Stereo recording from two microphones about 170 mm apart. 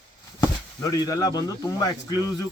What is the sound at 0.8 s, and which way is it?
Speech, 20° left (ahead or behind).